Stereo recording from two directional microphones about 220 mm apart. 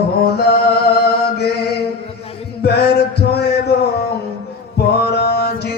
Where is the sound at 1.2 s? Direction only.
45° left (ahead or behind).